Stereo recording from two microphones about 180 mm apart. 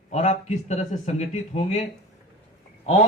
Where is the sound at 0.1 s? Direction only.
40° left (ahead or behind).